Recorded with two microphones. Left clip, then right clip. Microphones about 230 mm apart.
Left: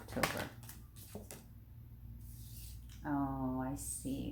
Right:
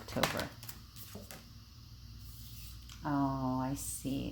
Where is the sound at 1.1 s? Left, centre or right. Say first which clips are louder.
Left 2 dB; centre.